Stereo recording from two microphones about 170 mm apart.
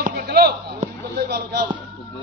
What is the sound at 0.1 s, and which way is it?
Speech, 75° right (ahead or behind).